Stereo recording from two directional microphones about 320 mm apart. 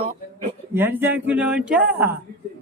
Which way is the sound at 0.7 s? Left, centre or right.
Centre.